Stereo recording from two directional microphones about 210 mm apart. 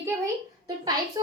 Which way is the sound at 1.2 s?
15° right (ahead or behind).